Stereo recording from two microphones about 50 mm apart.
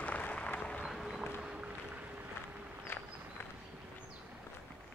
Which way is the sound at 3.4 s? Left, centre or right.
Left.